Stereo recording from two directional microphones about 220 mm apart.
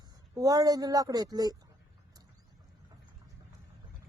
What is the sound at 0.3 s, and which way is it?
A woman's voice, 15° right (ahead or behind).